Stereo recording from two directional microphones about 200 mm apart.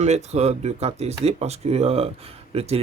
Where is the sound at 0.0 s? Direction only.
35° right (ahead or behind).